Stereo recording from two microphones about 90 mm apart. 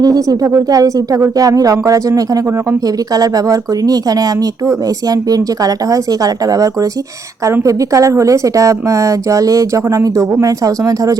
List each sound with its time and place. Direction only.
0.0 s speech: 40° right (ahead or behind)
5.3 s speech: 45° right (ahead or behind)